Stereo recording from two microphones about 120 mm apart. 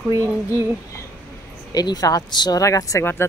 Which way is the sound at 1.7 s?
30° left (ahead or behind).